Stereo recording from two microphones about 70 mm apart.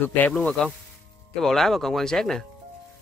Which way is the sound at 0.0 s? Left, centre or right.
Left.